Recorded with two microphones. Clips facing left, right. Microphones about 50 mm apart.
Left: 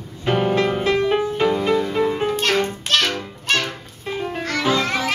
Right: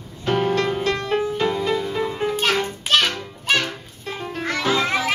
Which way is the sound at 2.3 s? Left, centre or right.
Centre.